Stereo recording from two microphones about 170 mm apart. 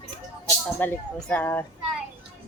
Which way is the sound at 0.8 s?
10° left (ahead or behind).